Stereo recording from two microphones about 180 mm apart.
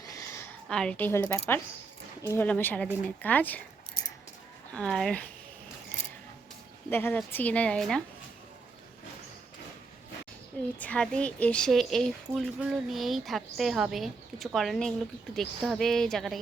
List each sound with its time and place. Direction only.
0.0 s a sound: 20° left (ahead or behind)
0.7 s a woman's voice: 5° left (ahead or behind)
4.0 s a sound: 25° left (ahead or behind)
4.7 s a woman's voice: 5° left (ahead or behind)
6.9 s a woman's voice: 10° left (ahead or behind)
10.8 s a woman's voice: 5° left (ahead or behind)